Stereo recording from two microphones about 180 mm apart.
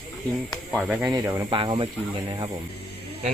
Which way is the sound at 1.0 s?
20° right (ahead or behind).